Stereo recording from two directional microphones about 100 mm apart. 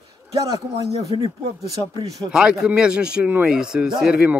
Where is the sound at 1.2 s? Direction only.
35° right (ahead or behind).